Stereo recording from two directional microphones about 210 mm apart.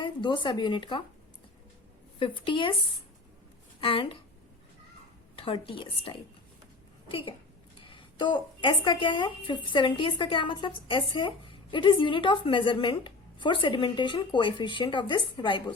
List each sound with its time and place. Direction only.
0.0 s speech: 20° left (ahead or behind)
2.1 s a woman's voice: 25° left (ahead or behind)
3.8 s a woman's voice: 25° left (ahead or behind)
5.4 s a woman's voice: 25° left (ahead or behind)